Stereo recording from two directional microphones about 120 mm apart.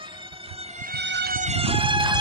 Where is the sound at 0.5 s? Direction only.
60° right (ahead or behind).